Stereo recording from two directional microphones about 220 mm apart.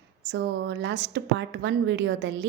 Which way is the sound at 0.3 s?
55° right (ahead or behind).